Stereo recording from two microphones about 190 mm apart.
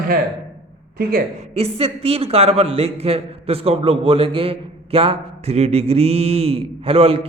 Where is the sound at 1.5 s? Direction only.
30° right (ahead or behind).